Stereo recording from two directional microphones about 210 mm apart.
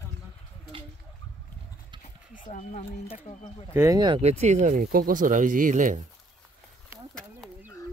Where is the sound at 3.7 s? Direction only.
15° right (ahead or behind); by 6.1 s 35° right (ahead or behind).